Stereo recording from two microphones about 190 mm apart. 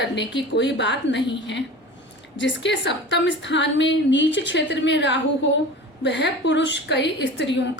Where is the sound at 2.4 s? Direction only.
70° left (ahead or behind).